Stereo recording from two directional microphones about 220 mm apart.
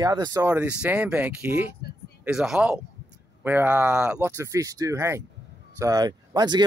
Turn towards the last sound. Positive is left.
turn(degrees=-20)  # may be behind; listen again after turning